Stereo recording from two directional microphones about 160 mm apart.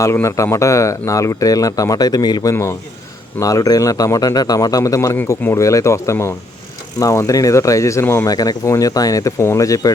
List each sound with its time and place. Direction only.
0.0 s a man's voice: 15° left (ahead or behind)